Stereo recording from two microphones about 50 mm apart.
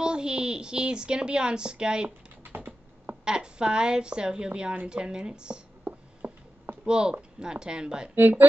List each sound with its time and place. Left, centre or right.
0.0 s a woman's voice: centre
2.4 s typing: right
3.3 s a woman's voice: centre
5.9 s a sound: right
6.8 s a woman's voice: centre
8.1 s speech: right